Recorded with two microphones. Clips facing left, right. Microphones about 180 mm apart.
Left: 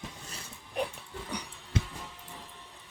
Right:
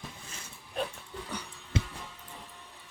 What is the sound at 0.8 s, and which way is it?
Dog, 20° left (ahead or behind).